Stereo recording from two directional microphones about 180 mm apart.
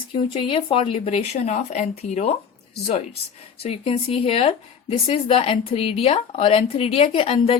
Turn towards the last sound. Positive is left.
turn(degrees=35)  # may be behind; listen again after turning